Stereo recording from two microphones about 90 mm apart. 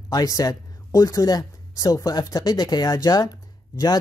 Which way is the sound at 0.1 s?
45° left (ahead or behind).